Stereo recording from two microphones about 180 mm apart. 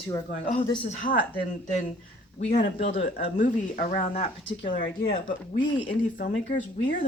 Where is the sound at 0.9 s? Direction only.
45° left (ahead or behind).